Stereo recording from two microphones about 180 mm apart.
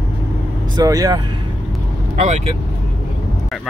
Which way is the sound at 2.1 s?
40° right (ahead or behind).